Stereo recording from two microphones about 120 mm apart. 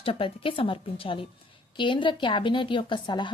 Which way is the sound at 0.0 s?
50° left (ahead or behind).